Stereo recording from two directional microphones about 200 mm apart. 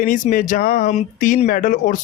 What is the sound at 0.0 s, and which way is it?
A man's voice, 40° left (ahead or behind).